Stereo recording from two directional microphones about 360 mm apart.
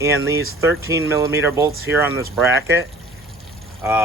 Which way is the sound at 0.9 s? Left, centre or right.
Centre.